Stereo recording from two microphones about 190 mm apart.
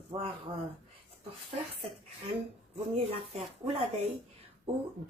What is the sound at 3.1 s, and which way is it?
A woman's voice, 35° right (ahead or behind).